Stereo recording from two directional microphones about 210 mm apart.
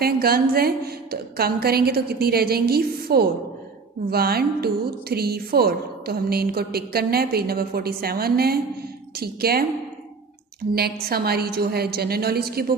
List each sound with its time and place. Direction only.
0.0 s a woman's voice: 45° right (ahead or behind)
10.8 s a woman's voice: 50° right (ahead or behind)